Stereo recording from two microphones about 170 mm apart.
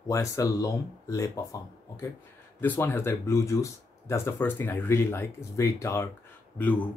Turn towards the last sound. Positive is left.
turn(degrees=10)  # may be behind; listen again after turning